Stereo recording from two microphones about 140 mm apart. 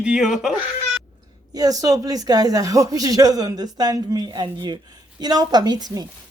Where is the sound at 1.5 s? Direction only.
25° right (ahead or behind).